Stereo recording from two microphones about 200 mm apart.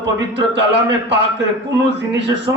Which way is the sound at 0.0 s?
60° right (ahead or behind).